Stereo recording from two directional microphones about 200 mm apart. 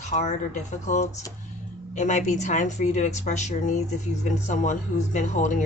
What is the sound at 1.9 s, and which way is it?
Speech, 35° left (ahead or behind).